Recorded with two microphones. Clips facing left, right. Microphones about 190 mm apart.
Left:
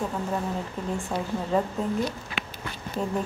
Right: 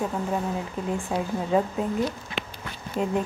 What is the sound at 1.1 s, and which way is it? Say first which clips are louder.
Speech: right 3 dB; 15° right (ahead or behind).